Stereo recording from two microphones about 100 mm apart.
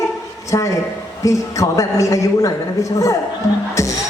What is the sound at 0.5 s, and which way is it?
A woman's voice, 35° left (ahead or behind).